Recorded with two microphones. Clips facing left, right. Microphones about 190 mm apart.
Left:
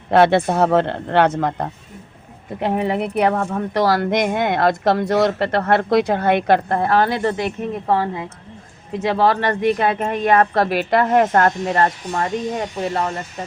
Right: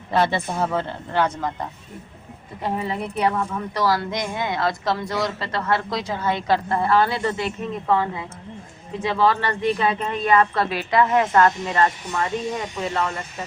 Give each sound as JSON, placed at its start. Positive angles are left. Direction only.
{"t": 0.1, "sound": "speech", "side_deg": 65}
{"t": 9.0, "sound": "speech", "side_deg": 60}
{"t": 12.9, "sound": "speech", "side_deg": 35}